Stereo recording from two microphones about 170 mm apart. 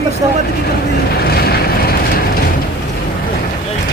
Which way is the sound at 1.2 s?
65° left (ahead or behind).